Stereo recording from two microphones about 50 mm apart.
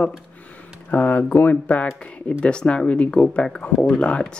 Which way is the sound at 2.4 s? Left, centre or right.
Centre.